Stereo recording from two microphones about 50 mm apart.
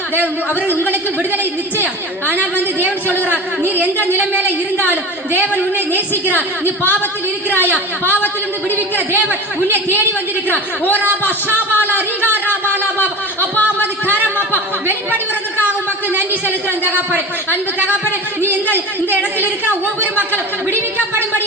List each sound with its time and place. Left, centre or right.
3.1 s a man's voice: left
3.8 s a man's voice: right
6.2 s a man's voice: right
8.7 s a man's voice: right
10.5 s a man's voice: left
11.9 s a man's voice: right
13.6 s a sound: left
16.1 s a man's voice: right